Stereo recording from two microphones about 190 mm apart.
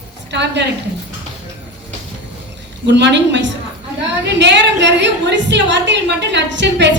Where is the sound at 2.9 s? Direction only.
65° right (ahead or behind).